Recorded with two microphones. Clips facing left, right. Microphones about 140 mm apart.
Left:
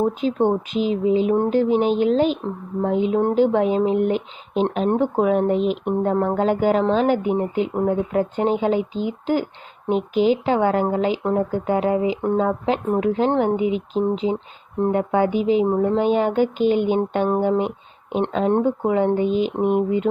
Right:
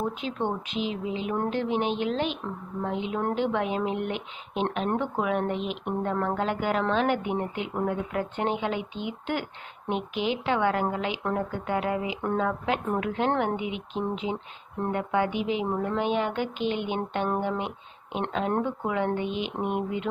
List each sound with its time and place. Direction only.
0.0 s speech: 40° left (ahead or behind)
15.6 s speech: 30° left (ahead or behind)